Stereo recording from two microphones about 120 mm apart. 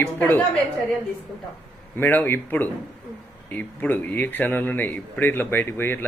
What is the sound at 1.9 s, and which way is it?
A man's voice, 15° left (ahead or behind).